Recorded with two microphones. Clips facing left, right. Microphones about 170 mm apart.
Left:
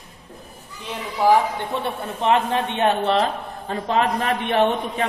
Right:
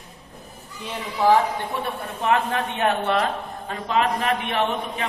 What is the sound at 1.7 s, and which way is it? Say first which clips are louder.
A man's voice: left 3 dB; 25° left (ahead or behind).